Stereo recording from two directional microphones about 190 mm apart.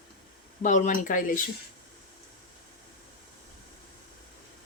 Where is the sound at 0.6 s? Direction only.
40° left (ahead or behind).